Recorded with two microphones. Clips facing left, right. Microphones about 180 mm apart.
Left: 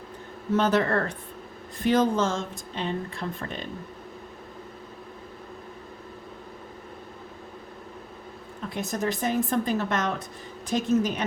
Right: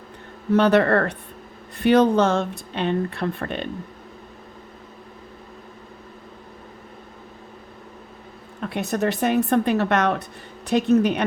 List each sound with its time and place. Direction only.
0.5 s speech: 65° right (ahead or behind)
8.6 s speech: 65° right (ahead or behind)